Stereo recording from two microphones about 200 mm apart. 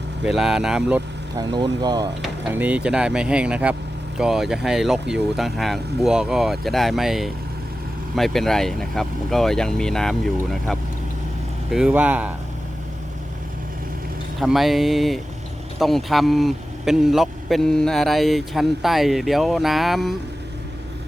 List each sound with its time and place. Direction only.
0.3 s a man's voice: centre (ahead or behind)
1.4 s speech: 20° right (ahead or behind)
2.2 s a man's voice: 10° right (ahead or behind)
14.3 s a man's voice: centre (ahead or behind)